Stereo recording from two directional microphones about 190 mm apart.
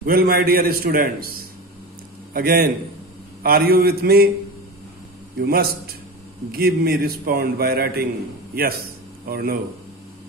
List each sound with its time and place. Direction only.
0.0 s a man's voice: 50° right (ahead or behind)
5.4 s a man's voice: 55° right (ahead or behind)
9.3 s a man's voice: 55° right (ahead or behind)